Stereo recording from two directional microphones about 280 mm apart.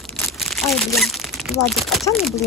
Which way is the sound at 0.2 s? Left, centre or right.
Centre.